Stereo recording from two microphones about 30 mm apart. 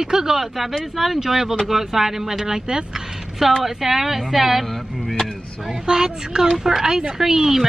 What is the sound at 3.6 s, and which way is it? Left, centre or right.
Speech, centre.